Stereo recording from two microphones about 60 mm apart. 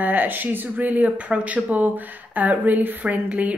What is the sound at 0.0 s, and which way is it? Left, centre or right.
Speech, right.